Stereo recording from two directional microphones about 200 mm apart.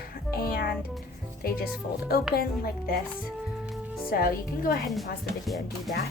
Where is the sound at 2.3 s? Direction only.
50° left (ahead or behind).